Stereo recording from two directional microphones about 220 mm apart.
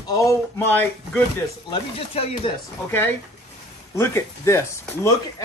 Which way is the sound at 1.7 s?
25° left (ahead or behind).